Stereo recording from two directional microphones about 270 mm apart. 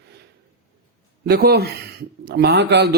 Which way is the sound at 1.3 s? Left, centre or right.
Right.